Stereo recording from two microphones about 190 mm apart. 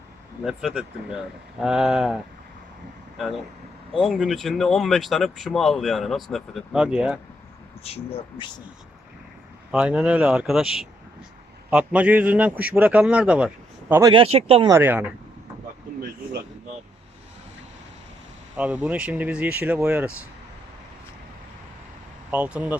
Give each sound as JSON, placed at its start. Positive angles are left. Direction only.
{"t": 0.4, "sound": "speech", "side_deg": -5}
{"t": 3.9, "sound": "speech", "side_deg": 0}
{"t": 7.9, "sound": "speech", "side_deg": 30}
{"t": 9.7, "sound": "a man's voice", "side_deg": -5}
{"t": 14.1, "sound": "speech", "side_deg": -30}
{"t": 14.7, "sound": "a man's voice", "side_deg": -10}
{"t": 18.5, "sound": "a man's voice", "side_deg": -5}
{"t": 22.3, "sound": "a man's voice", "side_deg": -5}